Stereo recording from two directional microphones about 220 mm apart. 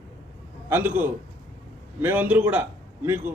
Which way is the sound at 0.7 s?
10° right (ahead or behind).